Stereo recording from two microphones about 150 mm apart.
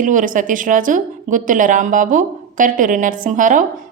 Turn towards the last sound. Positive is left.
turn(degrees=-60)  # may be behind; listen again after turning